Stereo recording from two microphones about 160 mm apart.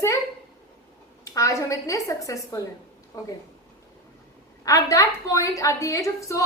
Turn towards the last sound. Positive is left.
turn(degrees=20)  # may be behind; listen again after turning